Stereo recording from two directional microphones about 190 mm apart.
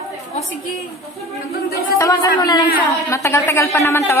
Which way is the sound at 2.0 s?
20° left (ahead or behind).